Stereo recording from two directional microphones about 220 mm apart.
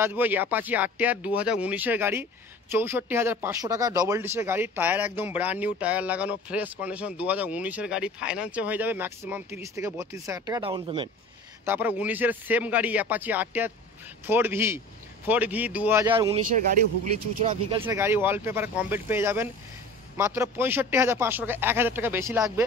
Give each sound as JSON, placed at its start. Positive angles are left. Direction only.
{"t": 0.0, "sound": "speech", "side_deg": -10}
{"t": 11.6, "sound": "speech", "side_deg": -10}
{"t": 16.5, "sound": "speech", "side_deg": -35}
{"t": 17.8, "sound": "speech", "side_deg": -10}